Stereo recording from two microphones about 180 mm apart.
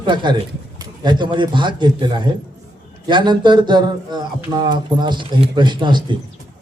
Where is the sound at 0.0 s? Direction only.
25° right (ahead or behind).